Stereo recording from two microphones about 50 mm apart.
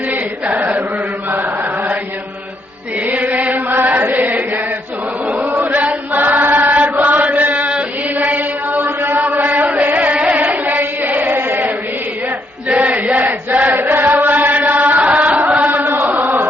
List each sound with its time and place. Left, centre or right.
0.1 s chant: right
3.1 s chant: right
12.6 s chant: right